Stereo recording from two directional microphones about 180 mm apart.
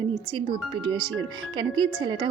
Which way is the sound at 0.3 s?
25° right (ahead or behind).